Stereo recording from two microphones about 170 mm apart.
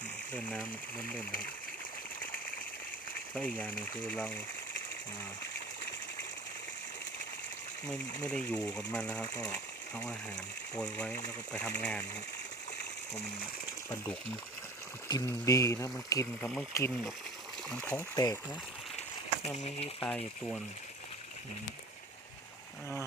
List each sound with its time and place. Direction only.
0.3 s speech: 10° left (ahead or behind)
3.3 s speech: 10° left (ahead or behind)
8.2 s speech: 10° left (ahead or behind)
13.9 s speech: 10° left (ahead or behind)
15.3 s speech: 20° left (ahead or behind)
18.1 s speech: 20° left (ahead or behind)
19.5 s speech: 40° left (ahead or behind)
20.0 s speech: 5° left (ahead or behind)